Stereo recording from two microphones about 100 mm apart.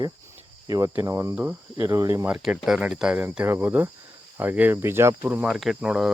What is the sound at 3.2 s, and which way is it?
Speech, 20° right (ahead or behind).